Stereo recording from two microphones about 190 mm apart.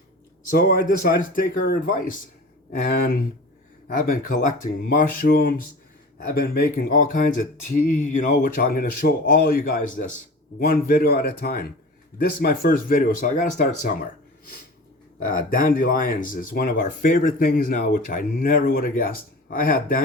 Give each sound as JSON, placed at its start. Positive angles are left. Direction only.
{"t": 0.5, "sound": "speech", "side_deg": 50}
{"t": 15.2, "sound": "speech", "side_deg": 45}